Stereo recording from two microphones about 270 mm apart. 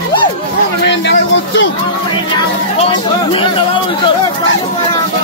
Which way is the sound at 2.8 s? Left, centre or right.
Centre.